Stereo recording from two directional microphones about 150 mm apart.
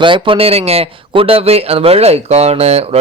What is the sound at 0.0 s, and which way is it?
A man's voice, 35° right (ahead or behind).